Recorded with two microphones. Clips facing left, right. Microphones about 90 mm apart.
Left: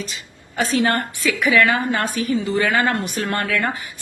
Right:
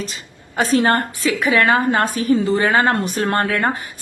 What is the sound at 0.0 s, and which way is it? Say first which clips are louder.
A woman's voice: right 2 dB; 35° right (ahead or behind).